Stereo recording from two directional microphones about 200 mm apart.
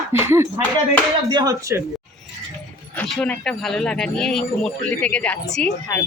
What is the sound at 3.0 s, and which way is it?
Speech, 5° left (ahead or behind).